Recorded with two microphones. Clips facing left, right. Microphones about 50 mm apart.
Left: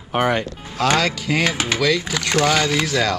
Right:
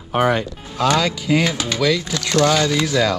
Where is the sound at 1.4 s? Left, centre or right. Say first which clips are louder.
Even; left.